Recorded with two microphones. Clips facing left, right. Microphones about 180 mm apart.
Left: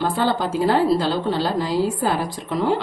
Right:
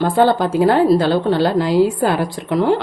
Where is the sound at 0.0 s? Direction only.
55° right (ahead or behind).